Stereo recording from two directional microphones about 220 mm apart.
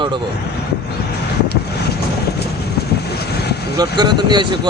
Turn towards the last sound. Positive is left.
turn(degrees=-20)  # may be behind; listen again after turning